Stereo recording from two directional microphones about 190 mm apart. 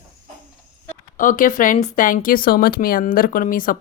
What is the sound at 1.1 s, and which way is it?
Speech, 45° left (ahead or behind).